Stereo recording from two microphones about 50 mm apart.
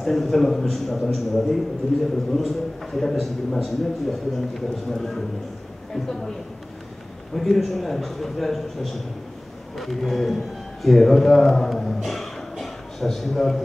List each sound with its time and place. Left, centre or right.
0.0 s a man's voice: centre
7.3 s a man's voice: centre